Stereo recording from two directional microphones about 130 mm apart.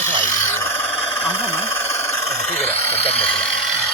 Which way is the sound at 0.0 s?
20° left (ahead or behind).